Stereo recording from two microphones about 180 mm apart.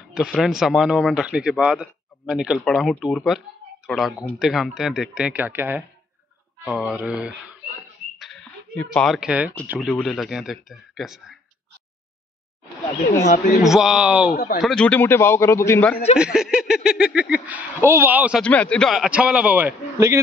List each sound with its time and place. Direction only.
0.1 s speech: 5° right (ahead or behind)
8.2 s a sound: 5° left (ahead or behind)
9.7 s speech: centre (ahead or behind)
13.6 s speech: centre (ahead or behind)
14.3 s speech: 60° left (ahead or behind)
14.6 s a man's voice: 5° left (ahead or behind)
16.2 s a sound: 5° right (ahead or behind)
18.4 s speech: 5° left (ahead or behind); by 20.2 s 15° right (ahead or behind)